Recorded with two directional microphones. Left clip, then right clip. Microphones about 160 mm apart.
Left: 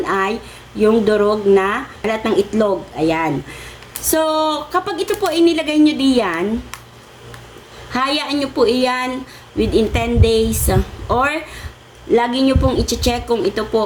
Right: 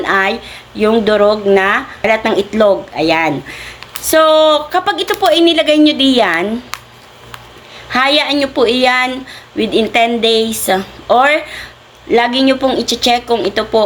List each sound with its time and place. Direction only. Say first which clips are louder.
0.0 s speech: right 5 dB; 15° left (ahead or behind)
7.9 s speech: right 7 dB; 20° left (ahead or behind)